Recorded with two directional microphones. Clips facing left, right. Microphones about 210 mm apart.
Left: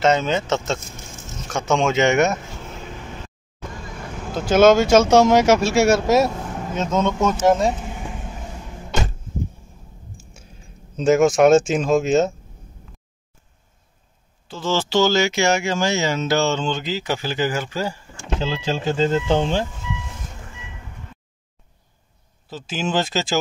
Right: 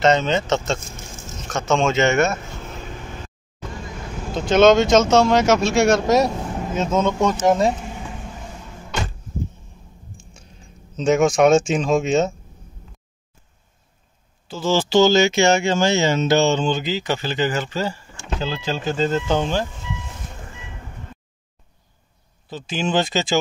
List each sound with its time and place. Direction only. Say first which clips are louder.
0.0 s speech: right 1 dB; 5° left (ahead or behind)
4.3 s speech: even; 5° left (ahead or behind)
6.7 s speech: right 1 dB; 5° right (ahead or behind)
11.0 s speech: left 1 dB; 5° left (ahead or behind)
14.5 s speech: right 3 dB; 10° right (ahead or behind)
16.8 s speech: right 1 dB; 5° left (ahead or behind)
18.4 s speech: left 1 dB; 25° left (ahead or behind)
22.5 s speech: right 1 dB; 5° left (ahead or behind)